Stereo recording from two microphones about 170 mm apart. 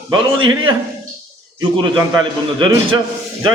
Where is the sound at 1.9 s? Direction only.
25° right (ahead or behind).